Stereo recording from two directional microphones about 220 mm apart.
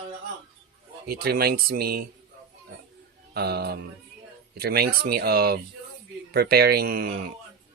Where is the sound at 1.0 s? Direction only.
45° right (ahead or behind).